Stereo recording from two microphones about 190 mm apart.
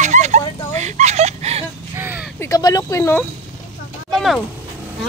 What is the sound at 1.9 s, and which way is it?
Speech, 10° right (ahead or behind).